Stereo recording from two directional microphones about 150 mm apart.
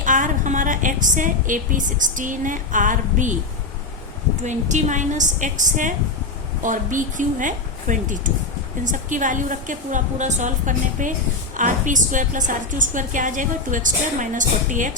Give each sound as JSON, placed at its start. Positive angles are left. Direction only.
{"t": 0.0, "sound": "a woman's voice", "side_deg": -60}
{"t": 4.4, "sound": "a woman's voice", "side_deg": -55}